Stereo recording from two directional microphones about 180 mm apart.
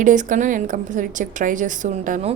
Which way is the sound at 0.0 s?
45° right (ahead or behind).